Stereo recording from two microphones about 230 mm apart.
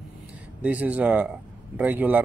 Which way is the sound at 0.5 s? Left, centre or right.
Centre.